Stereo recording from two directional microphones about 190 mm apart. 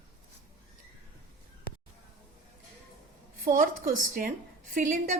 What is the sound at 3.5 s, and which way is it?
A woman's voice, 45° right (ahead or behind).